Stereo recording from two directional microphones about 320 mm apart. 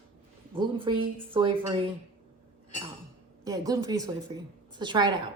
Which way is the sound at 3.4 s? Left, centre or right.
Centre.